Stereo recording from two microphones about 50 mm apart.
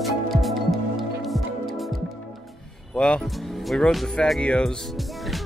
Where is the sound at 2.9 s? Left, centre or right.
Centre.